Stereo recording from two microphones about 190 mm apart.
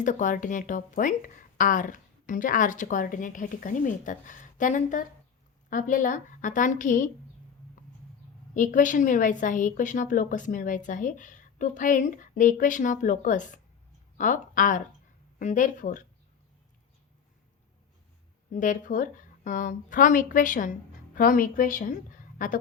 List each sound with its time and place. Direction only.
0.0 s speech: 40° left (ahead or behind)
8.5 s speech: 45° left (ahead or behind)
18.5 s speech: 40° left (ahead or behind)